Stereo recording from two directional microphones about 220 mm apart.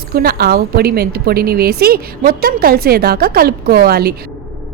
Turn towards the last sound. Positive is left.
turn(degrees=-45)  # may be behind; listen again after turning